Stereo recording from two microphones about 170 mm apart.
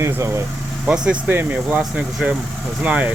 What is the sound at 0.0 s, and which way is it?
Speech, 15° right (ahead or behind).